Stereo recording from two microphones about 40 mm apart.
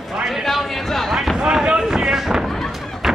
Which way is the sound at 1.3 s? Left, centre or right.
Right.